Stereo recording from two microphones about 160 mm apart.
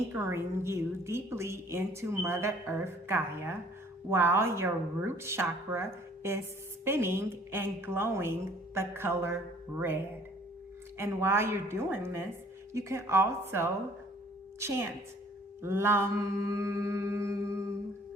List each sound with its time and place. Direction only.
0.1 s a woman's voice: 15° right (ahead or behind)
15.6 s a woman's voice: 15° right (ahead or behind)